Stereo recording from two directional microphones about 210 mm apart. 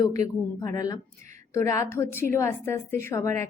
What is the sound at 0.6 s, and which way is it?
Speech, 15° left (ahead or behind).